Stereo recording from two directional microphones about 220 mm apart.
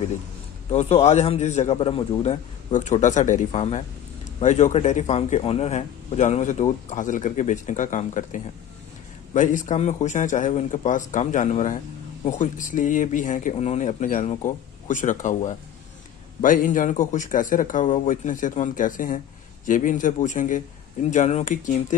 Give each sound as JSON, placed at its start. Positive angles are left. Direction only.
{"t": 0.7, "sound": "a man's voice", "side_deg": 30}